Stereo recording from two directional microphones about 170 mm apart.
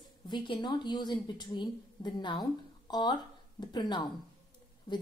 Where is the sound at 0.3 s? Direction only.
25° left (ahead or behind).